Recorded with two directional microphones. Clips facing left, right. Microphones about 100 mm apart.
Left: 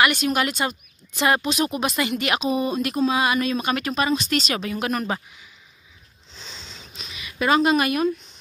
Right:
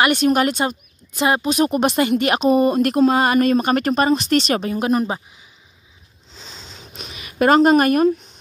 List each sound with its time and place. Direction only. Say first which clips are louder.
0.2 s speech: right 6 dB; 40° right (ahead or behind)
0.5 s speech: right 5 dB; 25° right (ahead or behind)
1.5 s a woman's voice: right 6 dB; 45° right (ahead or behind)
1.8 s speech: right 7 dB; 35° right (ahead or behind)
2.4 s speech: right 8 dB; 65° right (ahead or behind)
3.0 s a woman's voice: right 5 dB; 45° right (ahead or behind)
4.5 s a woman's voice: right 6 dB; 35° right (ahead or behind)
6.4 s a sound: right 2 dB; 50° right (ahead or behind)